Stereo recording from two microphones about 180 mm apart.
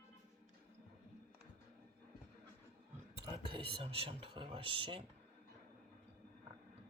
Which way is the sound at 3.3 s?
30° right (ahead or behind).